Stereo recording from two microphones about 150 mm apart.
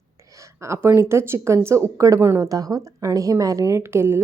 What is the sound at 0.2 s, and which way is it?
A woman's voice, 20° right (ahead or behind).